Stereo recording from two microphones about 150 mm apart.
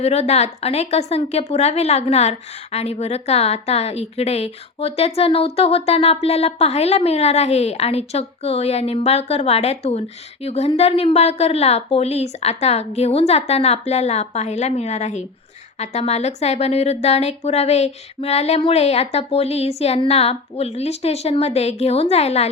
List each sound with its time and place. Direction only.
0.0 s a woman's voice: 45° left (ahead or behind)